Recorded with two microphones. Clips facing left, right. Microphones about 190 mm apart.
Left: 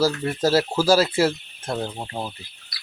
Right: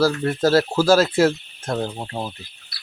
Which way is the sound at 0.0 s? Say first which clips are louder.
Right 3 dB; 10° left (ahead or behind).